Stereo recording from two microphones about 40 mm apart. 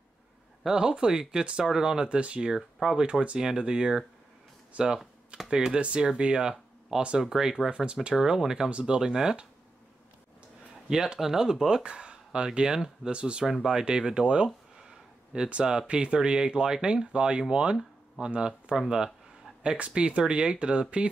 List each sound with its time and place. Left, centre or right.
0.7 s speech: centre
2.0 s speech: right
2.4 s speech: centre
3.0 s speech: right
7.2 s speech: centre
7.7 s speech: right
8.2 s speech: centre
8.6 s speech: right
10.9 s speech: centre
11.8 s speech: right
13.1 s speech: right
13.5 s speech: centre
14.8 s a sound: centre
15.9 s speech: right